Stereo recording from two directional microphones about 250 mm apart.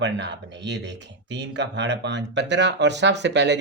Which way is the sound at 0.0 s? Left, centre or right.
Right.